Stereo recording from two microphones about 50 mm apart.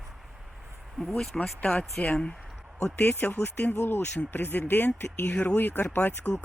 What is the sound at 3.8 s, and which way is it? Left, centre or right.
Speech, left.